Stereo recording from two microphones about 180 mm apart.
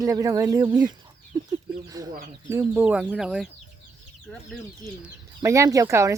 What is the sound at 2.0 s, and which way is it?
Chicken, 20° right (ahead or behind).